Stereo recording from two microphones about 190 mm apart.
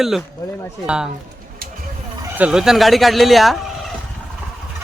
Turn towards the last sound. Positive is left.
turn(degrees=0)  # may be behind; listen again after turning